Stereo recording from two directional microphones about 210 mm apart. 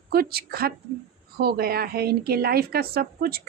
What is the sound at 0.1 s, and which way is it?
A woman's voice, 45° right (ahead or behind).